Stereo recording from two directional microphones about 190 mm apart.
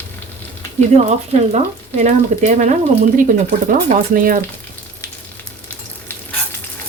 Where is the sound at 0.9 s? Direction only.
35° right (ahead or behind).